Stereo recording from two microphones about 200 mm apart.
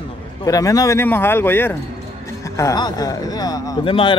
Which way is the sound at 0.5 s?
15° left (ahead or behind).